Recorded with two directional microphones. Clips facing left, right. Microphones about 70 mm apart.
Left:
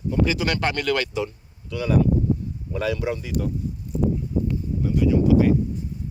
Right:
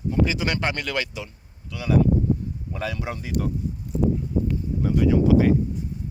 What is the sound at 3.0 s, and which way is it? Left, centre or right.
Speech, right.